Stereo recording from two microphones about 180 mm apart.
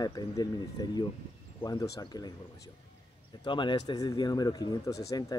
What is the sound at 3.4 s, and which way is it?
Speech, 25° left (ahead or behind).